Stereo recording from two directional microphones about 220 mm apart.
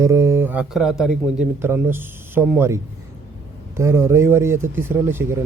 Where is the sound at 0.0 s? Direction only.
15° right (ahead or behind).